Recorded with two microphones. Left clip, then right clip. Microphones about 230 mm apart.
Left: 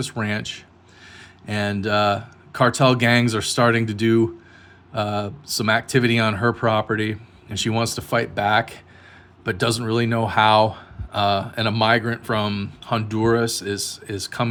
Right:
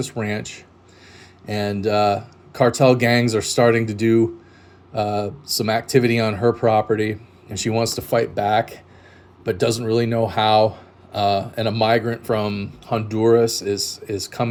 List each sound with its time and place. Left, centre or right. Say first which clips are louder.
0.0 s speech: even; left